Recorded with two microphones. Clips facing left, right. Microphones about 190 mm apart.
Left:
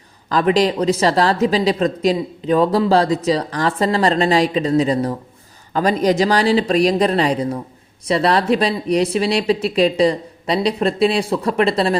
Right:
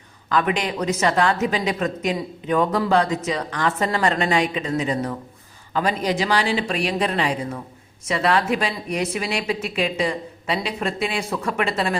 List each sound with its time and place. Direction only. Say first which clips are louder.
0.3 s speech: left 6 dB; 35° left (ahead or behind)